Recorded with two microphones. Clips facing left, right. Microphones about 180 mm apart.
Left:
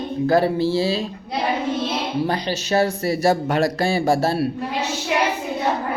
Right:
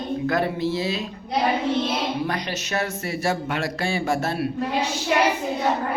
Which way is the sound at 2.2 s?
30° left (ahead or behind).